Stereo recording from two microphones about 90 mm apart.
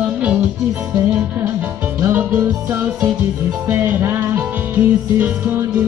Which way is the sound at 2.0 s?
25° right (ahead or behind).